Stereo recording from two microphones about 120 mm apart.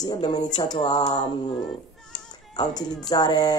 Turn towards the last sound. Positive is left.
turn(degrees=35)  # may be behind; listen again after turning